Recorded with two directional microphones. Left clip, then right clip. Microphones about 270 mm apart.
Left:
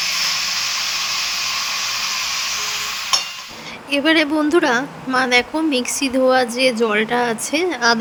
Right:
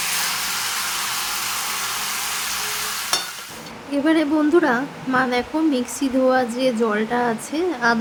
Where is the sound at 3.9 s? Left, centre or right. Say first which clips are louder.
Left 3 dB; left.